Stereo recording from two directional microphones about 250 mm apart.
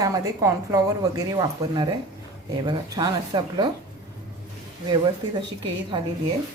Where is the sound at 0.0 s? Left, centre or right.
Centre.